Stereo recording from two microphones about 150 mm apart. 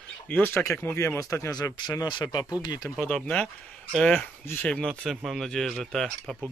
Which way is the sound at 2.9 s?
5° left (ahead or behind).